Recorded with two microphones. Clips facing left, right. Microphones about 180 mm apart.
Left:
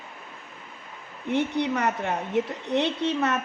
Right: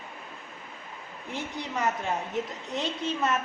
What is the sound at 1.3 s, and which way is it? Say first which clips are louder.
A woman's voice: left 11 dB; 65° left (ahead or behind).